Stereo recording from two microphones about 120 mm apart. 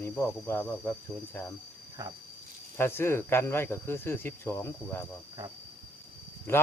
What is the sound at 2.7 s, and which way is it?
Speech, 20° left (ahead or behind).